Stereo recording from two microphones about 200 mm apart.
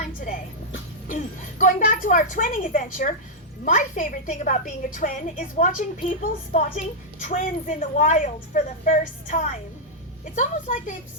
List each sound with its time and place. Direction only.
1.0 s a woman's voice: 40° left (ahead or behind)